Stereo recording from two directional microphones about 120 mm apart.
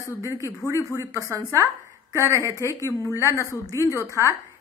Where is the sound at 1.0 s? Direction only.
25° right (ahead or behind).